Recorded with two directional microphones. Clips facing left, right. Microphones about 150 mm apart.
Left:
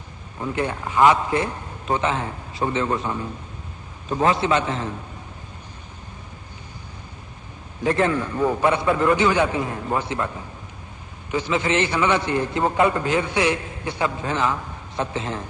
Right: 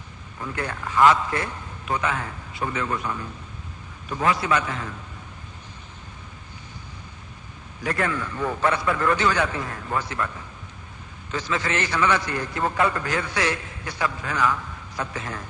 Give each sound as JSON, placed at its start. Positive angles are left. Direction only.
{"t": 0.3, "sound": "a man's voice", "side_deg": 25}
{"t": 7.9, "sound": "a man's voice", "side_deg": 25}
{"t": 8.4, "sound": "a man's voice", "side_deg": 20}